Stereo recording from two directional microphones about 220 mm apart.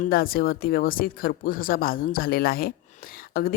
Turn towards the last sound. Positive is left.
turn(degrees=40)  # may be behind; listen again after turning